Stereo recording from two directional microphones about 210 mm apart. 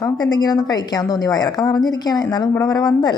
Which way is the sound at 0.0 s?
20° left (ahead or behind).